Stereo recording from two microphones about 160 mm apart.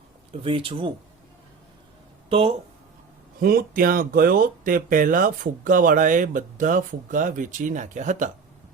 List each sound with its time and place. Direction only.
0.4 s speech: 35° right (ahead or behind)
3.4 s speech: 70° right (ahead or behind); by 8.3 s 50° right (ahead or behind)